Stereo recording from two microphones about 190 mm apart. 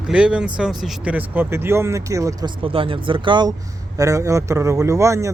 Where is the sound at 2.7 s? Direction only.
25° right (ahead or behind).